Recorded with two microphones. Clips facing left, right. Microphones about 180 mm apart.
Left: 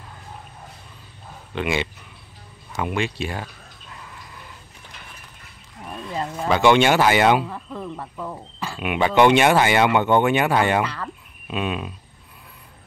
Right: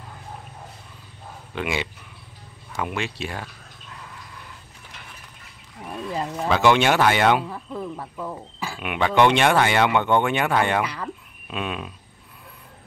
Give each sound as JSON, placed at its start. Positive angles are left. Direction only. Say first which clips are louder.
{"t": 1.5, "sound": "speech", "louder": "left 3 dB", "side_deg": -5}
{"t": 5.8, "sound": "speech", "louder": "even", "side_deg": -5}
{"t": 7.4, "sound": "speech", "louder": "right 1 dB", "side_deg": -5}
{"t": 10.8, "sound": "speech", "louder": "left 2 dB", "side_deg": -15}
{"t": 11.5, "sound": "speech", "louder": "left 3 dB", "side_deg": 5}